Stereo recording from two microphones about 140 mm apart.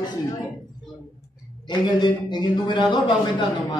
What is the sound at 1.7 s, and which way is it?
A man's voice, 35° left (ahead or behind).